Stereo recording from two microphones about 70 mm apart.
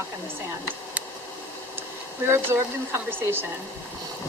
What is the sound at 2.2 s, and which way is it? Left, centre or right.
Speech, right.